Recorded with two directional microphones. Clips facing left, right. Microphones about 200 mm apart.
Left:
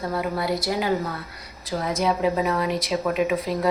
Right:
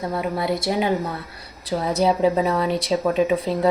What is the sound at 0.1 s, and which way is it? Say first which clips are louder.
A woman's voice: right 1 dB; 25° right (ahead or behind).